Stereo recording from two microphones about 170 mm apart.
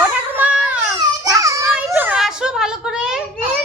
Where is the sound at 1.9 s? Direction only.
10° right (ahead or behind).